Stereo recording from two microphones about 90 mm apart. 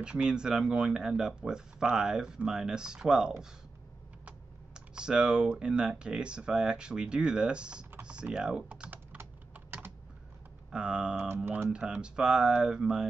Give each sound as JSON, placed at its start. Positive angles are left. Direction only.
{"t": 0.0, "sound": "speech", "side_deg": -10}
{"t": 8.0, "sound": "typing", "side_deg": -10}
{"t": 10.7, "sound": "speech", "side_deg": -10}
{"t": 11.2, "sound": "speech", "side_deg": -25}
{"t": 11.7, "sound": "speech", "side_deg": -10}